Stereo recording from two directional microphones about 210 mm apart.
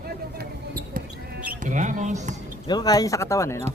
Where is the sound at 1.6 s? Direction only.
35° right (ahead or behind).